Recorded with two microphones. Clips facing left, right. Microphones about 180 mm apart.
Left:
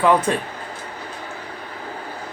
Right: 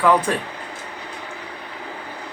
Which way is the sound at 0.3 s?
20° left (ahead or behind).